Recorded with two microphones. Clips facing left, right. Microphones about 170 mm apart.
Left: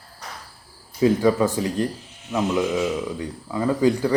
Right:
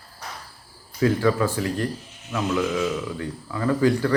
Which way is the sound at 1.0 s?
20° left (ahead or behind).